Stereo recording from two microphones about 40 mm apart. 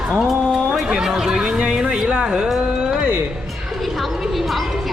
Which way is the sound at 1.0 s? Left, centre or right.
Centre.